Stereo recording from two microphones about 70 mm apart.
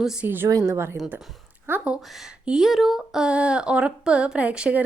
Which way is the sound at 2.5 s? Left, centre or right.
Centre.